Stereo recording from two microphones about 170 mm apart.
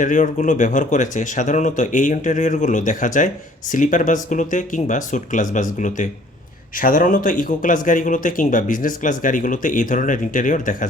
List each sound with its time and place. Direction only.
0.0 s speech: 45° left (ahead or behind)